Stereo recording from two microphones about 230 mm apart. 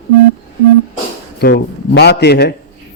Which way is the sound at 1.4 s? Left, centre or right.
Left.